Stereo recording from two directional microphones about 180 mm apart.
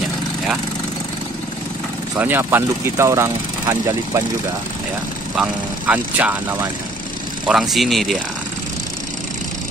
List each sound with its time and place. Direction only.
2.1 s speech: 10° right (ahead or behind)
5.3 s speech: 5° right (ahead or behind)